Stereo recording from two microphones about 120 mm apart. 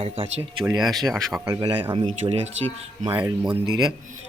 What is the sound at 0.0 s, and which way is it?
Speech, 55° right (ahead or behind).